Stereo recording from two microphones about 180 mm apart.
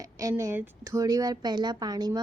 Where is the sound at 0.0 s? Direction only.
20° right (ahead or behind).